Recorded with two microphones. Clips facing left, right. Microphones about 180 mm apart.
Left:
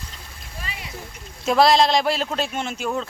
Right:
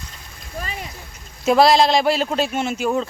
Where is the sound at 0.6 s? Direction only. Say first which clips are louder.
Right 5 dB; 45° right (ahead or behind).